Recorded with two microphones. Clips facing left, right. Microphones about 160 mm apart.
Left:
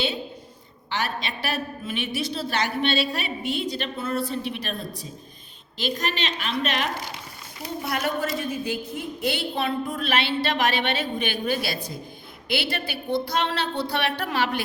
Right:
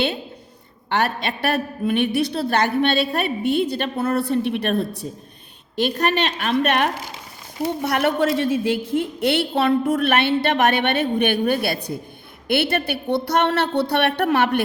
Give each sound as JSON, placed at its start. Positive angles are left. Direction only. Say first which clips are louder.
{"t": 0.9, "sound": "a woman's voice", "louder": "right 7 dB", "side_deg": -60}